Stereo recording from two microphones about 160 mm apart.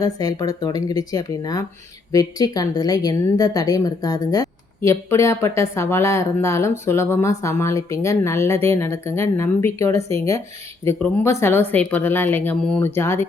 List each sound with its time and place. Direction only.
0.0 s a woman's voice: 25° left (ahead or behind)